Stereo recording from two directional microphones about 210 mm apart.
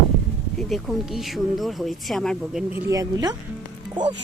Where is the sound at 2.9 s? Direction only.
15° right (ahead or behind).